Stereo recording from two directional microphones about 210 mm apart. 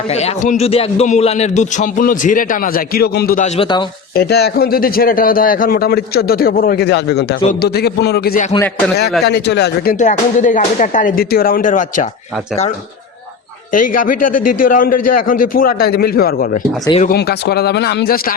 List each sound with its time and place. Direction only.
0.1 s a man's voice: 30° left (ahead or behind)
4.1 s a man's voice: 50° left (ahead or behind)
13.7 s a man's voice: 40° left (ahead or behind)